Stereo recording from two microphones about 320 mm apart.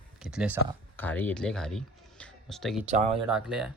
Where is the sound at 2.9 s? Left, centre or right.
Right.